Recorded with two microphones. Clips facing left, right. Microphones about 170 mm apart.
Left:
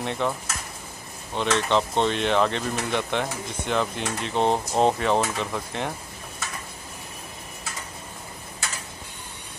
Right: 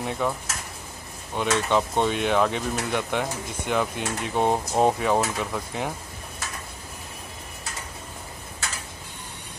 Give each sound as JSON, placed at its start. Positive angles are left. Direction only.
{"t": 0.0, "sound": "speech", "side_deg": -5}
{"t": 1.3, "sound": "speech", "side_deg": -10}